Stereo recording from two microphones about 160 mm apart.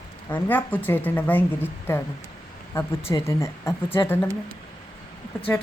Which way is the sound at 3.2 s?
15° left (ahead or behind).